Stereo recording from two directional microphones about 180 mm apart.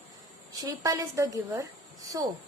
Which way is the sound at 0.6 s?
20° right (ahead or behind).